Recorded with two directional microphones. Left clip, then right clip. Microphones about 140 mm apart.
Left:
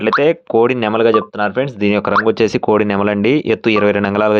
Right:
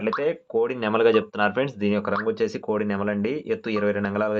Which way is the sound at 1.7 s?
60° left (ahead or behind).